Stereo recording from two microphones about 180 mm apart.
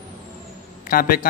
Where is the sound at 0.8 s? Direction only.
55° left (ahead or behind).